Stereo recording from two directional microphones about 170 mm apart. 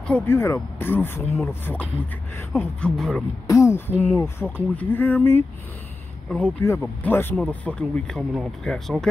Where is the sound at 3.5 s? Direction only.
20° left (ahead or behind).